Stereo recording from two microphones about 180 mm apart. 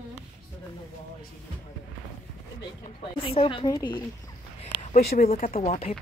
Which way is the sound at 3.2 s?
30° left (ahead or behind).